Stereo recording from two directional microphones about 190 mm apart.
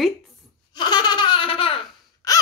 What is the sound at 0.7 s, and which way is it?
Laughter, 25° left (ahead or behind).